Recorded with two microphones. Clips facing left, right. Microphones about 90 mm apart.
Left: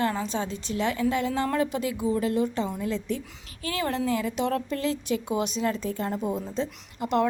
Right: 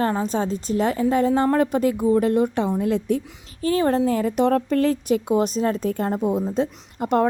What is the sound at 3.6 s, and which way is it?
A woman's voice, 35° right (ahead or behind).